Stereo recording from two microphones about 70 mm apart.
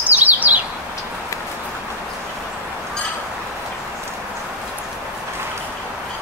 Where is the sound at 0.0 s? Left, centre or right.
Right.